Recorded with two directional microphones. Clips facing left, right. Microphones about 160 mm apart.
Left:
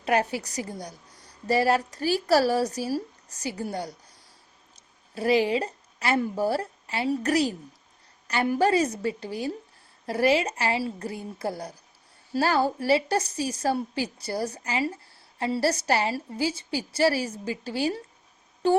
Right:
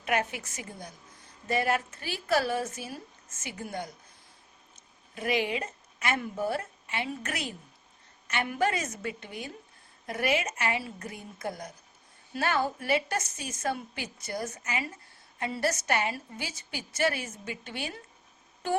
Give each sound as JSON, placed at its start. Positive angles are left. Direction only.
{"t": 0.0, "sound": "a woman's voice", "side_deg": 35}
{"t": 5.1, "sound": "a woman's voice", "side_deg": 35}